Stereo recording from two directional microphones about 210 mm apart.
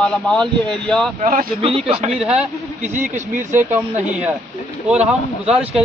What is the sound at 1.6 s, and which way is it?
Speech, 25° right (ahead or behind).